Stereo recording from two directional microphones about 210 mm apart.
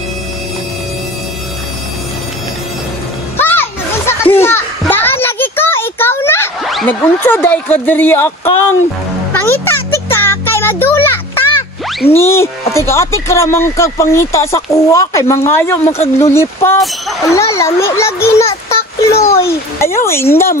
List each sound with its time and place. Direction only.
3.3 s music: 10° left (ahead or behind)
4.1 s a sound: 10° left (ahead or behind)
6.6 s speech: centre (ahead or behind)
9.3 s music: 10° left (ahead or behind)
12.1 s speech: 10° left (ahead or behind)
16.0 s speech: 30° left (ahead or behind)
16.3 s speech: 10° left (ahead or behind)